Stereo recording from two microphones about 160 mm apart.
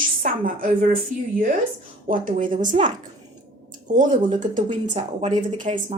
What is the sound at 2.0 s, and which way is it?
Speech, 55° right (ahead or behind).